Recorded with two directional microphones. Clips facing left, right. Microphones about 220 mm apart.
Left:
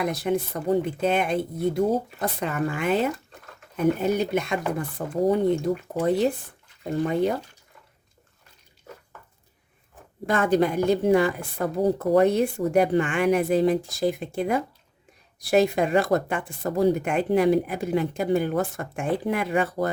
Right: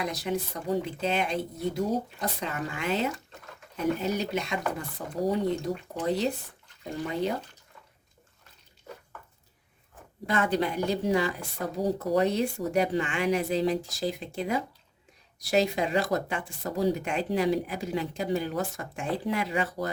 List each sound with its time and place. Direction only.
0.0 s a woman's voice: 55° left (ahead or behind)
10.2 s a woman's voice: 50° left (ahead or behind)